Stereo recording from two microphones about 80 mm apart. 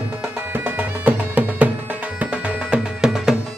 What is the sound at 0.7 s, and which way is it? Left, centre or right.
Music, right.